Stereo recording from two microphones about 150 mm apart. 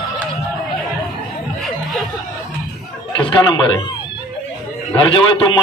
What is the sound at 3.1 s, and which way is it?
Speech, 30° left (ahead or behind).